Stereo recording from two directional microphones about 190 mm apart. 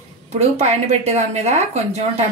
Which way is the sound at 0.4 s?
35° right (ahead or behind).